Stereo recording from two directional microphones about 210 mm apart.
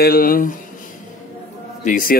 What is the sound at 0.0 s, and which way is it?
Speech, 45° left (ahead or behind).